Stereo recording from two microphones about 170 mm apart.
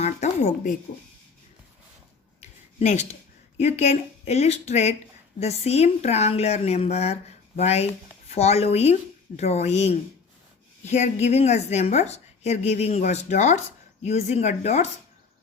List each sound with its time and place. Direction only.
0.0 s speech: 40° left (ahead or behind)
2.4 s a sound: 40° left (ahead or behind)
3.6 s a woman's voice: 40° left (ahead or behind)